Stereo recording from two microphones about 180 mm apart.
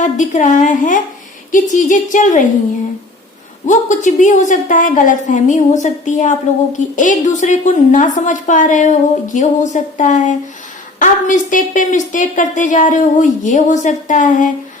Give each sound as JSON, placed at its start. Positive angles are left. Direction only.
{"t": 0.0, "sound": "a woman's voice", "side_deg": 40}
{"t": 3.7, "sound": "a woman's voice", "side_deg": 45}